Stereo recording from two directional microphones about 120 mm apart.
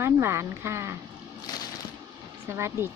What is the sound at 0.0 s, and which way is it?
Speech, 20° right (ahead or behind).